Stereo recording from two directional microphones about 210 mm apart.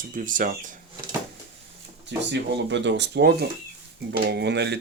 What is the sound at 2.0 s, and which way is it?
Speech, 55° right (ahead or behind).